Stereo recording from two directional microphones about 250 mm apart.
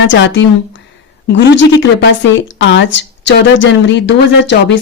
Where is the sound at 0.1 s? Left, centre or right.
Left.